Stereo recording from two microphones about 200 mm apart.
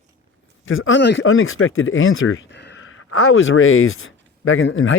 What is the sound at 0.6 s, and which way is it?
Speech, 80° left.